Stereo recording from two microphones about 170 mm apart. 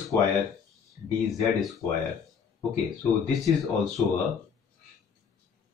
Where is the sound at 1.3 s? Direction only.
Centre (ahead or behind).